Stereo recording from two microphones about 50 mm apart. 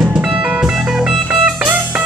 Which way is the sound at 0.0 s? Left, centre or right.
Centre.